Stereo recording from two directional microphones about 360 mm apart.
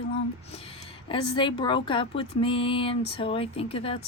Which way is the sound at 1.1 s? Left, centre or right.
Centre.